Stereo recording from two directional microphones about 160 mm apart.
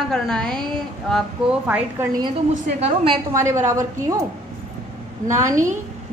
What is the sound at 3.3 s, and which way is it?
Speech, 15° right (ahead or behind).